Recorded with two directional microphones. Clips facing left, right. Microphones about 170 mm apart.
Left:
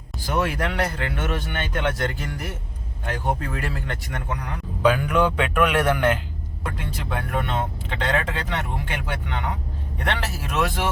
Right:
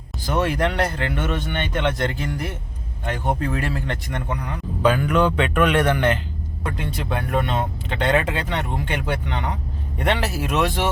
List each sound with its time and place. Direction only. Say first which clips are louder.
0.3 s speech: right 3 dB; 5° left (ahead or behind)
3.1 s speech: right 3 dB; 5° left (ahead or behind)